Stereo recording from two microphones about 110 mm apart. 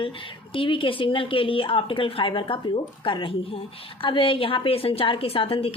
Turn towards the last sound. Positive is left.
turn(degrees=60)  # may be behind; listen again after turning